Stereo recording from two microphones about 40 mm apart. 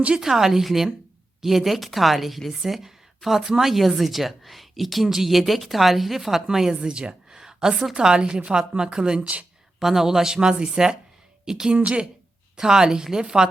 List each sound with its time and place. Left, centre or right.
0.1 s speech: centre
6.7 s speech: right
7.3 s a sound: centre
7.9 s speech: right
9.8 s speech: centre
11.8 s speech: right
12.5 s speech: centre